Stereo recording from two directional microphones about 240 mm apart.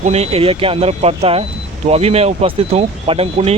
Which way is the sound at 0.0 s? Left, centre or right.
Right.